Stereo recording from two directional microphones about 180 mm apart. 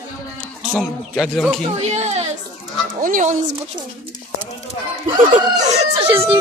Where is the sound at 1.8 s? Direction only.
40° right (ahead or behind).